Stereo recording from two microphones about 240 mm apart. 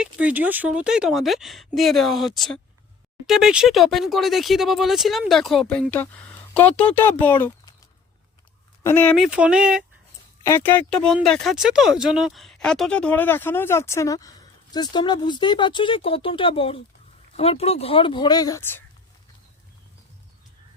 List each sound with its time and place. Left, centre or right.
0.0 s speech: centre
8.8 s speech: centre
10.4 s speech: centre